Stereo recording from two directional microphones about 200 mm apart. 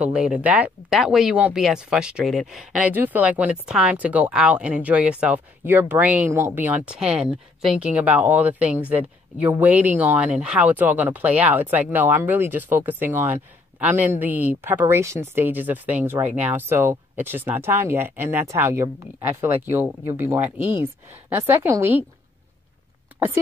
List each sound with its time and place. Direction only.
0.0 s speech: 5° right (ahead or behind)
23.1 s speech: 10° right (ahead or behind)